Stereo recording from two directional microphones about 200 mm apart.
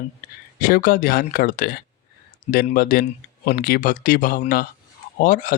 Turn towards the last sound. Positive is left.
turn(degrees=40)  # may be behind; listen again after turning